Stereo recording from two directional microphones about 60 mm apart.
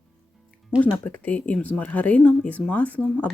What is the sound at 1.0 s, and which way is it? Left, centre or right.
Speech, left.